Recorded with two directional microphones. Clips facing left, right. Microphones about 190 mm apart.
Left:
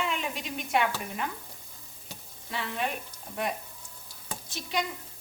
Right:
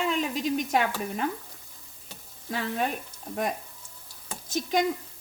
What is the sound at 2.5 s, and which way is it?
Speech, 40° right (ahead or behind).